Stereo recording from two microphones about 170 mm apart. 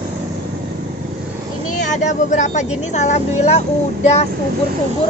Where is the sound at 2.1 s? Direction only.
45° left (ahead or behind).